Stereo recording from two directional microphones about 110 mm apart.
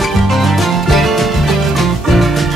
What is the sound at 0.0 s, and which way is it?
Music, centre (ahead or behind).